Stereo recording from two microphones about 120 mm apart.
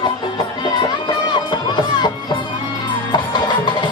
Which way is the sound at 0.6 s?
40° left (ahead or behind).